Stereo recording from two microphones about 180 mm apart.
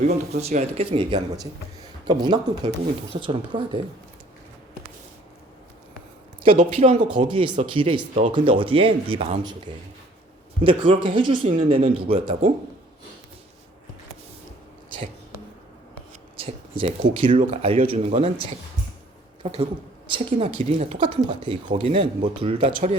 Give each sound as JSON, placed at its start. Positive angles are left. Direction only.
{"t": 0.0, "sound": "speech", "side_deg": -40}
{"t": 6.4, "sound": "speech", "side_deg": -35}
{"t": 10.6, "sound": "speech", "side_deg": -30}
{"t": 16.4, "sound": "speech", "side_deg": -30}
{"t": 19.4, "sound": "a woman's voice", "side_deg": -35}